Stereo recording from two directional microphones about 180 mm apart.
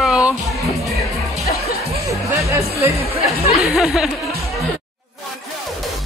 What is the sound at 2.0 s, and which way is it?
Music, 15° right (ahead or behind).